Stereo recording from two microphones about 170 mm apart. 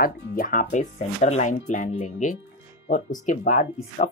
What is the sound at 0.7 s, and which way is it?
Speech, 40° left (ahead or behind).